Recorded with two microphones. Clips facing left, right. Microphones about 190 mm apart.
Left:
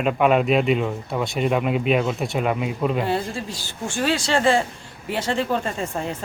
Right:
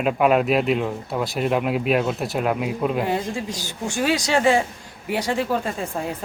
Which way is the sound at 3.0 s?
15° right (ahead or behind).